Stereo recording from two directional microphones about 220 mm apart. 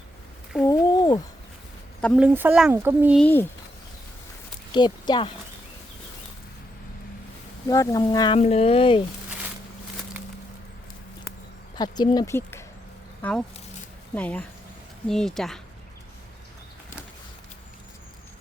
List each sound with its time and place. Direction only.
0.6 s a sound: 15° left (ahead or behind)
2.0 s speech: 5° left (ahead or behind)
2.2 s speech: 10° right (ahead or behind)
3.2 s speech: 10° left (ahead or behind)
4.7 s speech: 20° left (ahead or behind)
7.7 s speech: 15° left (ahead or behind)
8.4 s speech: 30° left (ahead or behind)
11.8 s speech: 20° left (ahead or behind); by 15.6 s centre (ahead or behind)